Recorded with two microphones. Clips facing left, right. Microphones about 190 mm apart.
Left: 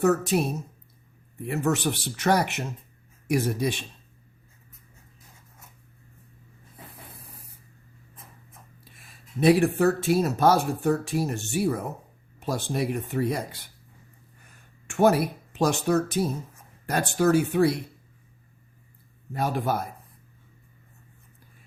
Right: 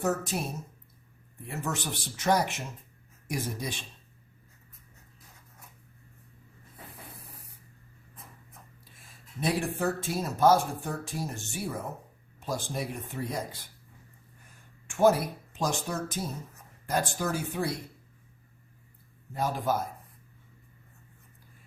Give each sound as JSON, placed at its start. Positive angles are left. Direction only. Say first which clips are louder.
{"t": 0.0, "sound": "speech", "louder": "left 8 dB", "side_deg": 70}
{"t": 1.5, "sound": "speech", "louder": "left 9 dB", "side_deg": 65}
{"t": 8.8, "sound": "speech", "louder": "left 2 dB", "side_deg": 70}
{"t": 14.8, "sound": "speech", "louder": "left 3 dB", "side_deg": 65}
{"t": 19.3, "sound": "speech", "louder": "left 3 dB", "side_deg": 65}